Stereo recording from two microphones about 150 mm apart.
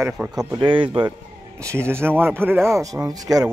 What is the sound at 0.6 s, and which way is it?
Speech, 35° right (ahead or behind).